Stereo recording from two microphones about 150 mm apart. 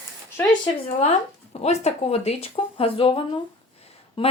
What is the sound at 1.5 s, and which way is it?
A woman's voice, 45° left (ahead or behind).